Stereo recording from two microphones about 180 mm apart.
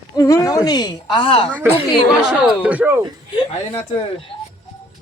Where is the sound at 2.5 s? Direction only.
5° right (ahead or behind).